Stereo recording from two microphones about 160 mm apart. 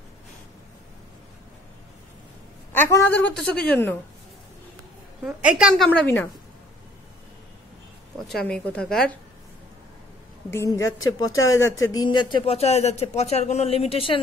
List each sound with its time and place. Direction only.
2.7 s a woman's voice: 10° left (ahead or behind)
5.2 s a woman's voice: 5° right (ahead or behind)
5.9 s a woman's voice: 10° left (ahead or behind)
8.3 s a woman's voice: 5° left (ahead or behind)
10.5 s speech: 20° left (ahead or behind); by 14.2 s 35° left (ahead or behind)